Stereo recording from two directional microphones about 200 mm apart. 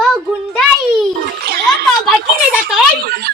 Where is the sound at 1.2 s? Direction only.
50° right (ahead or behind).